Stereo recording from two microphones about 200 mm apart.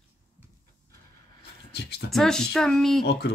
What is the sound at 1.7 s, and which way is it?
Speech, 55° left (ahead or behind).